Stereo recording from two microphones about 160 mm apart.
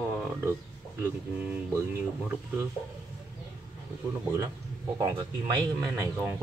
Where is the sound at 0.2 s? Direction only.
10° right (ahead or behind).